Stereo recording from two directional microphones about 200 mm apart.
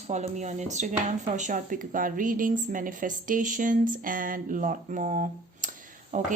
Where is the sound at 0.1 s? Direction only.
35° right (ahead or behind).